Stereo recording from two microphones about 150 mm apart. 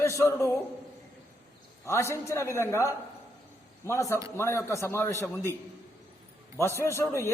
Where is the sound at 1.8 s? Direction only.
20° left (ahead or behind).